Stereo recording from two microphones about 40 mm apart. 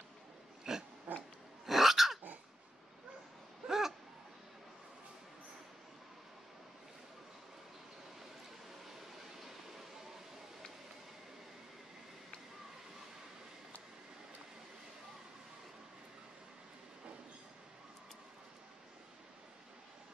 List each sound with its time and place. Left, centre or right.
0.7 s pig: centre
1.1 s pig: right
1.7 s dog: centre
3.6 s a sound: centre